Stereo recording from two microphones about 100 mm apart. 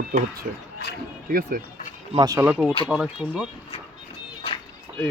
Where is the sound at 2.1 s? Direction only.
40° right (ahead or behind).